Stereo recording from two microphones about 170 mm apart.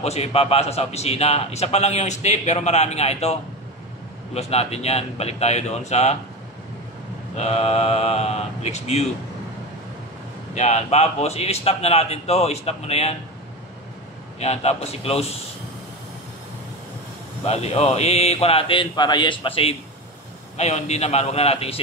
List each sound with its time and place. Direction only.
0.0 s a man's voice: 40° left (ahead or behind)
7.3 s a man's voice: 40° left (ahead or behind)
10.5 s a man's voice: 40° left (ahead or behind)
14.4 s a man's voice: 40° left (ahead or behind)
17.5 s a man's voice: 40° left (ahead or behind)